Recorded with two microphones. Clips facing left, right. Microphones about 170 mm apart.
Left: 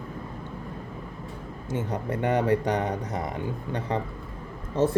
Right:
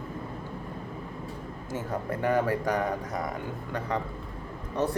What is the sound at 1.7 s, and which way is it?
Speech, 20° left (ahead or behind).